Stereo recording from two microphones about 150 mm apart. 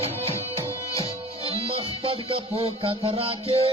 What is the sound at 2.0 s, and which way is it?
Music, 40° right (ahead or behind).